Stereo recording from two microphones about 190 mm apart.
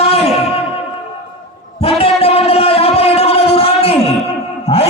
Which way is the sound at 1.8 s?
30° left (ahead or behind).